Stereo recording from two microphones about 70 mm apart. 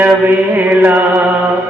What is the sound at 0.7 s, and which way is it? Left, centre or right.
Music, right.